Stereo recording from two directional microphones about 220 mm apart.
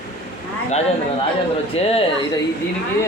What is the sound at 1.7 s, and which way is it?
Speech, 25° left (ahead or behind).